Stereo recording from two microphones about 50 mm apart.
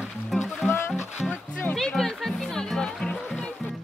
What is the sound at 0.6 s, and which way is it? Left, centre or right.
Music, left.